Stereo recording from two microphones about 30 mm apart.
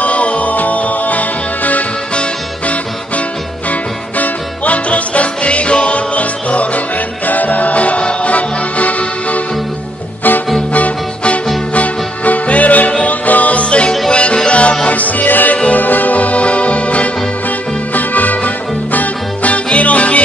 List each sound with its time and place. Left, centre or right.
0.0 s music: left
4.2 s music: left
7.2 s music: left
8.0 s music: left
8.3 s music: left
10.7 s music: left
14.9 s music: left
15.5 s music: left
15.8 s music: left
17.9 s music: left
19.5 s music: left